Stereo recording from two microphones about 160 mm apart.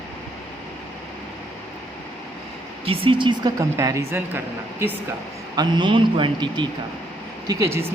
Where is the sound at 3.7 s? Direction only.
20° right (ahead or behind).